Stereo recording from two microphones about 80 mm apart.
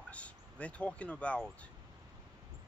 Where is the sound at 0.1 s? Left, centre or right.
Centre.